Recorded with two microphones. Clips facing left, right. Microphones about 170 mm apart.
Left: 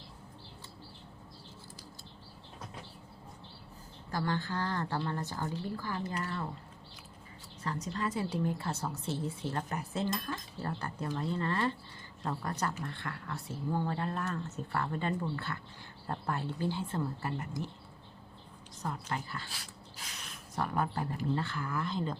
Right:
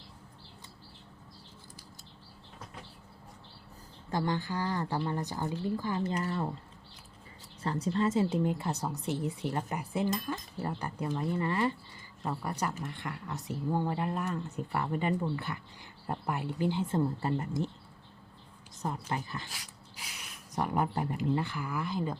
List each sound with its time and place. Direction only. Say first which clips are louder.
4.1 s speech: right 2 dB; 15° right (ahead or behind)
7.6 s speech: right 6 dB; 30° right (ahead or behind)
18.8 s speech: right 2 dB; 20° right (ahead or behind)
20.0 s a sound: even; 10° right (ahead or behind)
20.7 s speech: right 3 dB; 20° right (ahead or behind)